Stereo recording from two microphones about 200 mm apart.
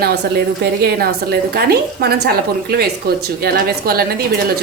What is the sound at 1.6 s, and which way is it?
A woman's voice, 50° right (ahead or behind).